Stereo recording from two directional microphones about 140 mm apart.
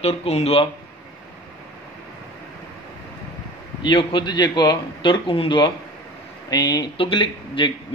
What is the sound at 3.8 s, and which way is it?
Speech, 35° left (ahead or behind).